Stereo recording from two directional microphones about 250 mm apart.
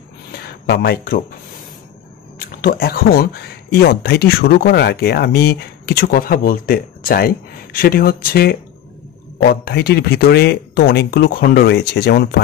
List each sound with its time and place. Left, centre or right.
0.5 s speech: left
2.3 s speech: left